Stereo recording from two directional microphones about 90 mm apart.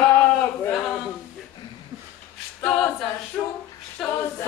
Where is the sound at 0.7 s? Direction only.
5° left (ahead or behind).